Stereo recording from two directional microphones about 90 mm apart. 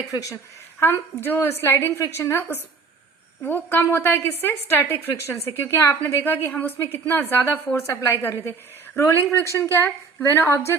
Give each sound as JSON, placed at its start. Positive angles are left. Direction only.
{"t": 0.8, "sound": "a woman's voice", "side_deg": 25}